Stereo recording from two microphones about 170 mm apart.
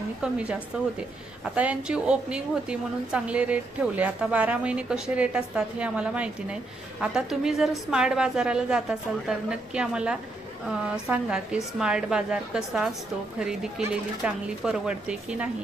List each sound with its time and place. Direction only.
0.2 s a woman's voice: 5° right (ahead or behind)
1.5 s a woman's voice: 5° right (ahead or behind)